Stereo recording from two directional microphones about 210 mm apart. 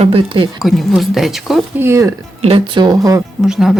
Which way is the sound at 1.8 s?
15° right (ahead or behind).